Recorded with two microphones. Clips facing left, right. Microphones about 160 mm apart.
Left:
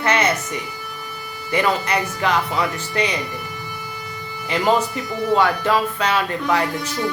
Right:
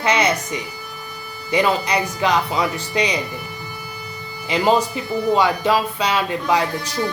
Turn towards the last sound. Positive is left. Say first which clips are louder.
# right 1 dB
turn(degrees=-15)  # may be behind; listen again after turning